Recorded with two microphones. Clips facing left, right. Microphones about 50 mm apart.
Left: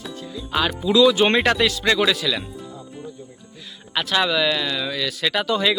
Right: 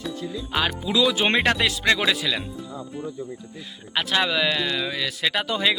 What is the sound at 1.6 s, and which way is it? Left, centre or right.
Speech, right.